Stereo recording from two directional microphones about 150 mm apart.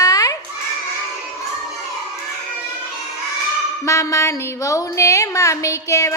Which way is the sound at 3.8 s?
20° left (ahead or behind).